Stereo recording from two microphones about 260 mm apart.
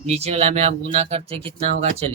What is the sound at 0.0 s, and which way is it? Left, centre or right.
Speech, right.